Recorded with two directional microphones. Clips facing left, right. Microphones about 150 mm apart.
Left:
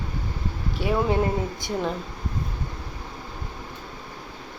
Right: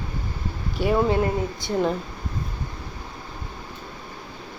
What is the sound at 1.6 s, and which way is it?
Speech, 15° left (ahead or behind).